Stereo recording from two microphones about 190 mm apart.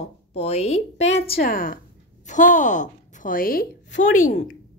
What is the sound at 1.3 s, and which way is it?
A woman's voice, 50° left (ahead or behind).